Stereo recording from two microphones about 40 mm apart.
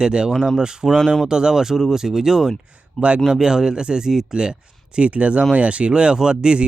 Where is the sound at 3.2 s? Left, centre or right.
Centre.